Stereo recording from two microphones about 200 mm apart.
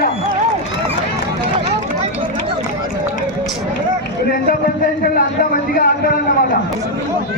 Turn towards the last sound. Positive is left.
turn(degrees=45)  # may be behind; listen again after turning